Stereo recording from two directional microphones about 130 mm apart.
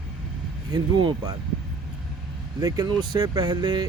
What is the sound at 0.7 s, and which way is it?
Speech, 30° right (ahead or behind).